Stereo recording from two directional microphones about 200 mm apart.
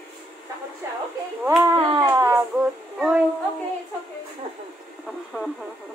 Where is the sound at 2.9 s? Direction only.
5° right (ahead or behind).